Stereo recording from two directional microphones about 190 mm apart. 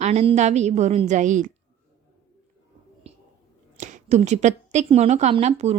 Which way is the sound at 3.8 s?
40° right (ahead or behind).